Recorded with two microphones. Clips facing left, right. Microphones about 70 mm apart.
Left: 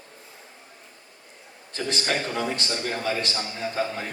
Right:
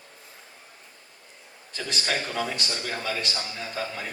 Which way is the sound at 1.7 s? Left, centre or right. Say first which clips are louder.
Left 2 dB; left.